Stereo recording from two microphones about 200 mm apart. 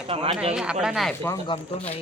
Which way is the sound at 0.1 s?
25° right (ahead or behind).